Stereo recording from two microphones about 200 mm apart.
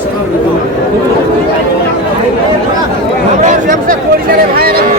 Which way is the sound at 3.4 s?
45° right (ahead or behind).